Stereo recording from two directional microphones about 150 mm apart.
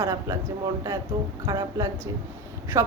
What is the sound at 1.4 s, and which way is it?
Speech, 25° right (ahead or behind).